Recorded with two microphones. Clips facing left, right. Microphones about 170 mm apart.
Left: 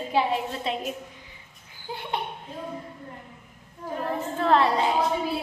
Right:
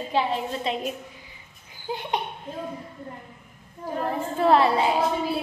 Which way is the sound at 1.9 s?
20° right (ahead or behind).